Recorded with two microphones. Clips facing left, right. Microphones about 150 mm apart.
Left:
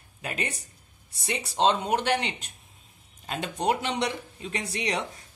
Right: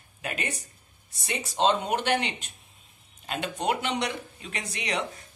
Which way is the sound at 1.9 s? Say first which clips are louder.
Left 1 dB; 30° left (ahead or behind).